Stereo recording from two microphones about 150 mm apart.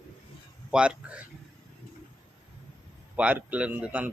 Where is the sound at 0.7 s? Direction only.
5° right (ahead or behind).